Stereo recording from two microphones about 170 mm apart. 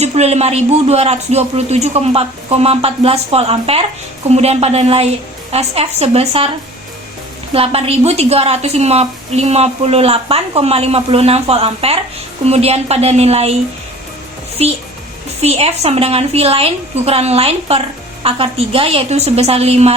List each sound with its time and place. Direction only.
0.0 s a woman's voice: 40° right (ahead or behind)
7.5 s a woman's voice: 35° right (ahead or behind)
14.6 s a woman's voice: 35° right (ahead or behind)